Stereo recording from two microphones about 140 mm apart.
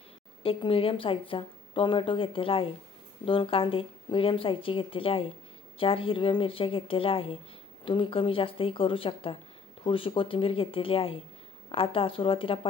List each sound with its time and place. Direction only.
0.4 s a woman's voice: 40° left (ahead or behind)